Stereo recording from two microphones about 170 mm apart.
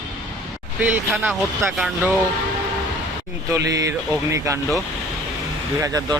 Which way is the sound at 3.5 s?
20° right (ahead or behind).